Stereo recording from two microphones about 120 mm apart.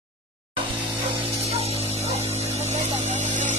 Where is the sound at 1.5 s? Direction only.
55° right (ahead or behind).